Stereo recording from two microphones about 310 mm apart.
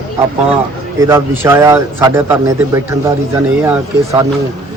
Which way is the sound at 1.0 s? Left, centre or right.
Centre.